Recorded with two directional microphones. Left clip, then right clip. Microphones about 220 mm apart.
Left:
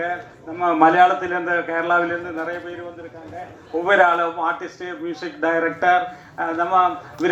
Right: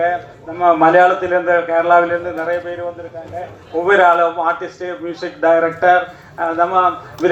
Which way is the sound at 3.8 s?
50° left (ahead or behind).